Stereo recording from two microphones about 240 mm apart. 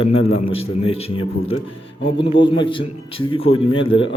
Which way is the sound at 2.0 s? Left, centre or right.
Left.